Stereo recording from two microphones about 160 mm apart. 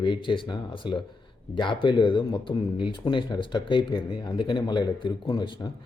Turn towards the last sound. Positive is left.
turn(degrees=25)  # may be behind; listen again after turning